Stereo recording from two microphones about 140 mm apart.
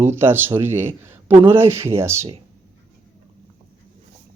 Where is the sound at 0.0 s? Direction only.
15° right (ahead or behind).